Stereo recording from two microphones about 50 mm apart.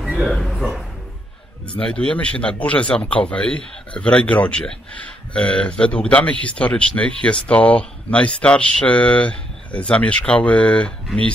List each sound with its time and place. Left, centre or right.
0.2 s speech: centre
1.7 s a man's voice: left